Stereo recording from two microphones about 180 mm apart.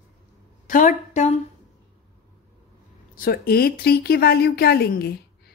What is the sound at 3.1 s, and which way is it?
A woman's voice, 55° left (ahead or behind).